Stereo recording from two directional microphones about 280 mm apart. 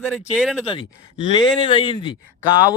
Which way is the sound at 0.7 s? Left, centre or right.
Centre.